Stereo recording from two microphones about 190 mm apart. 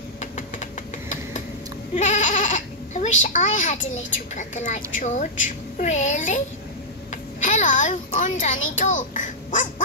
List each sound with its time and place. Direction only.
0.2 s vehicle: 40° left (ahead or behind)
2.0 s goat: 40° left (ahead or behind)
3.2 s a child's voice: 40° left (ahead or behind)